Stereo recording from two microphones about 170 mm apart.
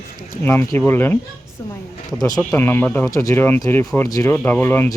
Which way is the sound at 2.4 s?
5° left (ahead or behind).